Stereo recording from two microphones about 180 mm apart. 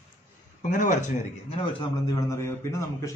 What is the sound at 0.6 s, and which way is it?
Speech, 45° left (ahead or behind).